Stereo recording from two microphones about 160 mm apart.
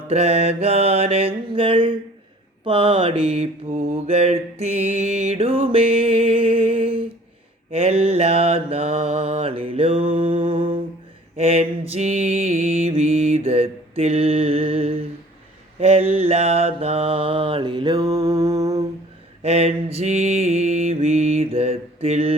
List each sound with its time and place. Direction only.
0.1 s mantra: 40° right (ahead or behind)
3.9 s mantra: 40° right (ahead or behind)
5.7 s music: 35° right (ahead or behind)
7.7 s mantra: 40° right (ahead or behind)
10.5 s humming: 35° right (ahead or behind)
11.3 s mantra: 40° right (ahead or behind); by 18.8 s 20° right (ahead or behind)
19.4 s mantra: 40° right (ahead or behind)